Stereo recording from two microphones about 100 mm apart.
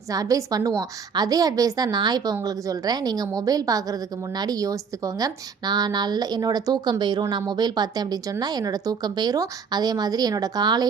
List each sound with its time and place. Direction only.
0.1 s a woman's voice: 35° right (ahead or behind)